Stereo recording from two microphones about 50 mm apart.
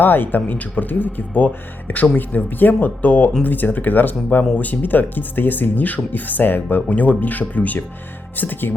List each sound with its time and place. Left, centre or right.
0.0 s speech: left